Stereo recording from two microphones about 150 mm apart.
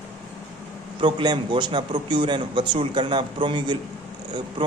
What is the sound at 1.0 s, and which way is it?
A man's voice, 30° right (ahead or behind).